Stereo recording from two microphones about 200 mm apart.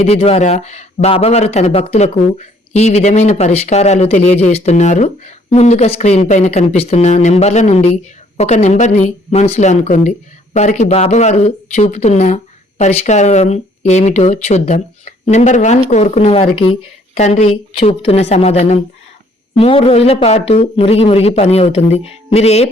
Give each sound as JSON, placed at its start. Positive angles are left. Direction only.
{"t": 0.0, "sound": "speech", "side_deg": 30}